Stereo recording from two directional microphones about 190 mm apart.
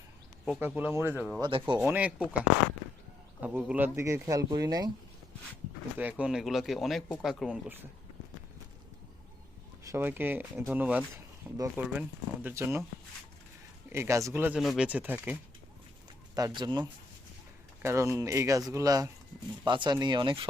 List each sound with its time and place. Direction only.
0.4 s speech: 5° right (ahead or behind)
1.4 s speech: 25° right (ahead or behind)
1.8 s speech: 5° right (ahead or behind)
3.4 s speech: 5° right (ahead or behind)
6.0 s speech: 10° right (ahead or behind)
9.8 s speech: 15° right (ahead or behind)
13.9 s speech: 15° right (ahead or behind)
16.3 s speech: 20° right (ahead or behind)